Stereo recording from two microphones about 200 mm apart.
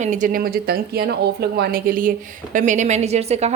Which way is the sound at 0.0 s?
40° right (ahead or behind).